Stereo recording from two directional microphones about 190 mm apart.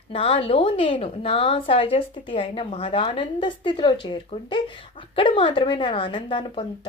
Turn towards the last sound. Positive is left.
turn(degrees=25)  # may be behind; listen again after turning